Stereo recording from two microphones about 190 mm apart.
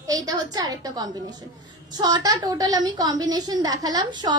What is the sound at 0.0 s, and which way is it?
A woman's voice, 20° right (ahead or behind).